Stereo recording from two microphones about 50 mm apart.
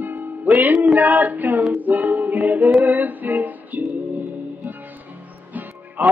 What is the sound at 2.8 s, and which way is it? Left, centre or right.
Female singing, right.